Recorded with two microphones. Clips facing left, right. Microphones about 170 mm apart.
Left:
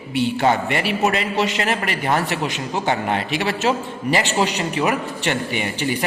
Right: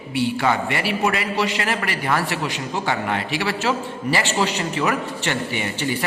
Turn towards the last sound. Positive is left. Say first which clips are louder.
# left 2 dB
turn(degrees=15)  # may be behind; listen again after turning